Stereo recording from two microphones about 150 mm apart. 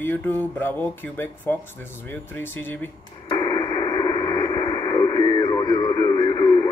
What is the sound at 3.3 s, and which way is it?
Radio, 25° left (ahead or behind).